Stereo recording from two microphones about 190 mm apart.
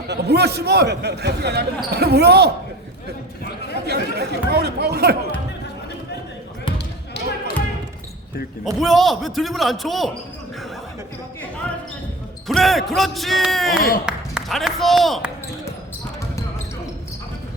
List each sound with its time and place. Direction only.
0.1 s speech: 60° right (ahead or behind)
3.8 s speech: 60° right (ahead or behind)
6.7 s basketball bounce: 60° left (ahead or behind)
8.8 s speech: centre (ahead or behind)
12.5 s speech: centre (ahead or behind)
13.7 s speech: 50° left (ahead or behind)
14.0 s speech: 5° right (ahead or behind)